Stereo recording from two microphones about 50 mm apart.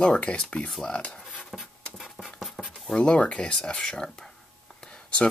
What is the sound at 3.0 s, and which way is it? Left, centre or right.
Speech, left.